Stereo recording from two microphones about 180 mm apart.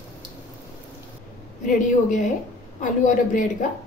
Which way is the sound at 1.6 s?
40° left (ahead or behind).